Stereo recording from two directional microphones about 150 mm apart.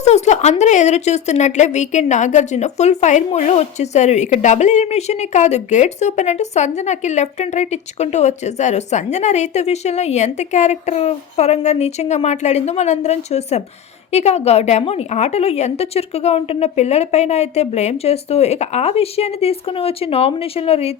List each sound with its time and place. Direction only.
0.0 s a woman's voice: 50° left (ahead or behind)